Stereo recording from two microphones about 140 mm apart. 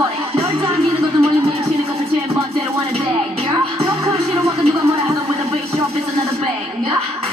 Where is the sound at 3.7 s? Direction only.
45° right (ahead or behind).